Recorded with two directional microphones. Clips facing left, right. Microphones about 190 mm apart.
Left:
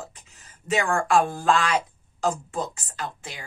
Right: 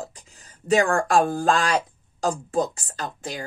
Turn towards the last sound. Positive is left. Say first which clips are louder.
# right 4 dB
turn(degrees=-40)  # may be behind; listen again after turning